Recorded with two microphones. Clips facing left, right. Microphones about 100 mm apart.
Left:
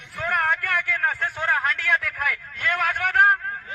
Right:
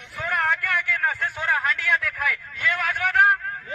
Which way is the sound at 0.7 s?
50° left (ahead or behind).